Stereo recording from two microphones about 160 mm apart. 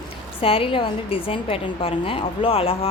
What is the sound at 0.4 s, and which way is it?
A woman's voice, 35° left (ahead or behind).